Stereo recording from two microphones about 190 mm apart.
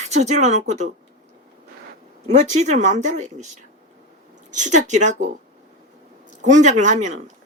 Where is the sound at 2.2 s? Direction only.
35° right (ahead or behind).